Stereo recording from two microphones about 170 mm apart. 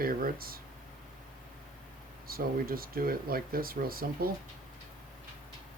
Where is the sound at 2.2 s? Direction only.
60° right (ahead or behind).